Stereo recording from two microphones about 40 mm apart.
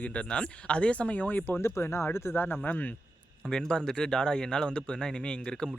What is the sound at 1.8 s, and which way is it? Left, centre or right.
Speech, left.